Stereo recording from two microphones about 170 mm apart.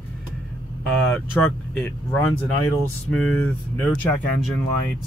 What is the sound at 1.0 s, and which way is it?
Speech, 10° left (ahead or behind).